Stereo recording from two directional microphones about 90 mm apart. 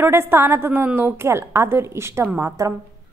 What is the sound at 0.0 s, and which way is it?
A woman's voice, 25° right (ahead or behind).